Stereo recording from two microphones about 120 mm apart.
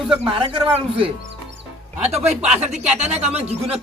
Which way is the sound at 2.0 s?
65° right (ahead or behind).